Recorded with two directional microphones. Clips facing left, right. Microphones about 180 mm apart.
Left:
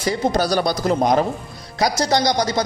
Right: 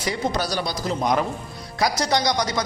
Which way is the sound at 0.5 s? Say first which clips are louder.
Left 7 dB; 55° left (ahead or behind).